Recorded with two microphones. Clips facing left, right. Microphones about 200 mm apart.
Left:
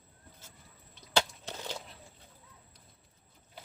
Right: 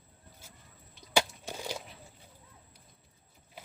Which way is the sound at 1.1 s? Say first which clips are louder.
Right 1 dB; 10° right (ahead or behind).